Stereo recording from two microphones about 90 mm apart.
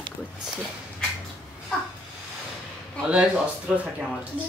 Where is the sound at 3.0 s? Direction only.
15° right (ahead or behind).